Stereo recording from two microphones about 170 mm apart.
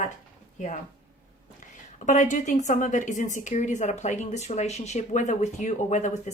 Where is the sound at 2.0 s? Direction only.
45° left (ahead or behind).